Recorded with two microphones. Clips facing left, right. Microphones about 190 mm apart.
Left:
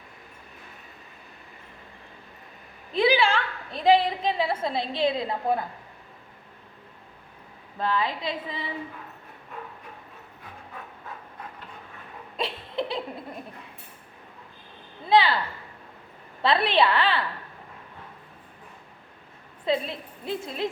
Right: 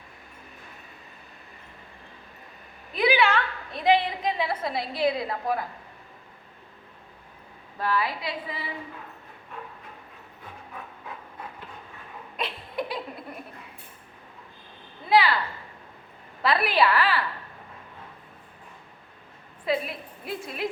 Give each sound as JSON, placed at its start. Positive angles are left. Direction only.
{"t": 2.9, "sound": "a sound", "side_deg": 30}
{"t": 7.8, "sound": "a woman's voice", "side_deg": 20}
{"t": 12.4, "sound": "laughter", "side_deg": 25}
{"t": 15.1, "sound": "a sound", "side_deg": 25}
{"t": 16.4, "sound": "a woman's voice", "side_deg": 25}
{"t": 19.6, "sound": "a woman's voice", "side_deg": 25}